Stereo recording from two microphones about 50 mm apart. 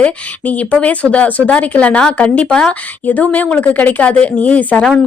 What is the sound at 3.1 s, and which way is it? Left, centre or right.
Speech, left.